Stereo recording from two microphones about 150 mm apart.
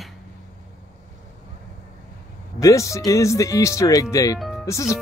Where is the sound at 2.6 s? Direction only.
20° left (ahead or behind).